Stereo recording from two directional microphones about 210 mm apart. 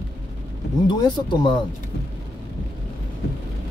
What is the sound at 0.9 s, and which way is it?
Speech, 20° left (ahead or behind).